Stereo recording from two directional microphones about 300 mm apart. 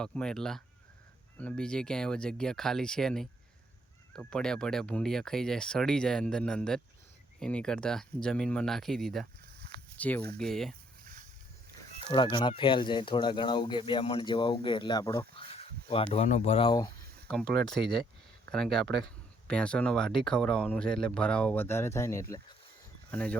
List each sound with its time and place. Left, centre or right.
0.0 s speech: centre
12.0 s speech: centre